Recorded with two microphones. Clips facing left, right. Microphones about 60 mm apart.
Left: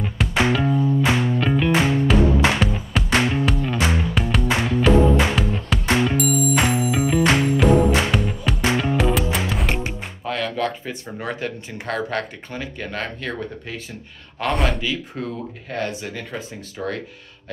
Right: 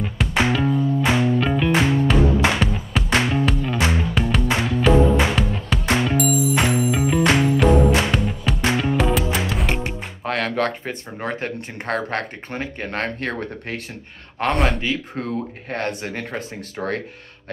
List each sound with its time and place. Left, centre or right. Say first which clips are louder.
0.0 s music: even; centre
10.2 s music: right 2 dB; right
11.1 s speech: right 1 dB; right
13.0 s speech: right 3 dB; right
14.5 s speech: right 1 dB; centre
14.8 s speech: right 2 dB; right
15.7 s speech: right 1 dB; right